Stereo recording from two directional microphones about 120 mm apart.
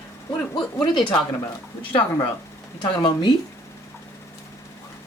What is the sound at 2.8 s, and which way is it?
Speech, 40° left (ahead or behind).